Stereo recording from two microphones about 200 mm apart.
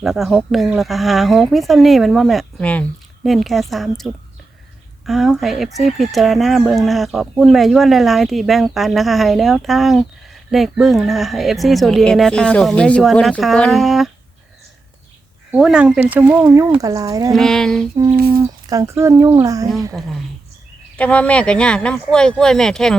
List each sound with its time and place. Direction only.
0.0 s speech: centre (ahead or behind)
15.5 s speech: 5° right (ahead or behind)
17.3 s speech: centre (ahead or behind)
17.9 s speech: 20° right (ahead or behind)
18.2 s speech: 50° right (ahead or behind)
18.7 s speech: 15° right (ahead or behind)
20.9 s speech: 5° left (ahead or behind)